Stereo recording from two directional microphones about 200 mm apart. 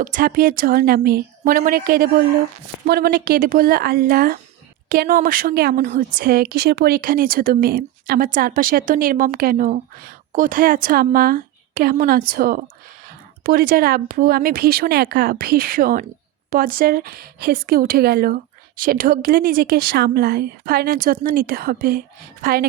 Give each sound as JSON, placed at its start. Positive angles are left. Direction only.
{"t": 0.0, "sound": "a woman's voice", "side_deg": -45}